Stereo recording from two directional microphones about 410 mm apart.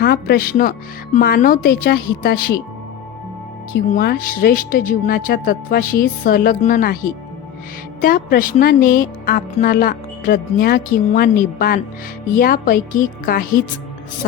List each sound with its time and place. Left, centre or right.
0.0 s speech: left
3.7 s speech: left